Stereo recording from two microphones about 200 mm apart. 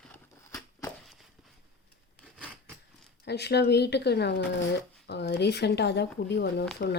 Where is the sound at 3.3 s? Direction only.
55° left (ahead or behind).